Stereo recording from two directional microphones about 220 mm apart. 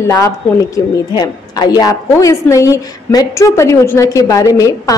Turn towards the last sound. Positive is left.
turn(degrees=15)  # may be behind; listen again after turning